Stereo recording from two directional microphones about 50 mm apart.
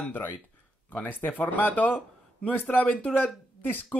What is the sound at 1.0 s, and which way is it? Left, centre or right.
Speech, left.